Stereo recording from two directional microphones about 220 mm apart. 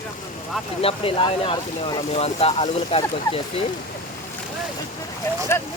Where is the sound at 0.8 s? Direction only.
25° left (ahead or behind).